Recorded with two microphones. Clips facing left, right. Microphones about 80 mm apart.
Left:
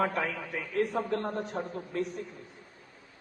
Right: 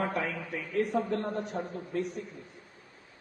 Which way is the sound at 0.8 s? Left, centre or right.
Left.